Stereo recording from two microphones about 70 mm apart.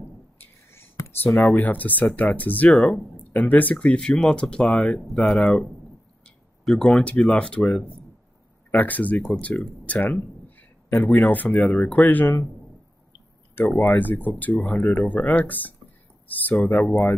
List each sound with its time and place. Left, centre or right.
0.4 s whispering: left
1.5 s speech: left
3.7 s speech: centre
13.7 s speech: left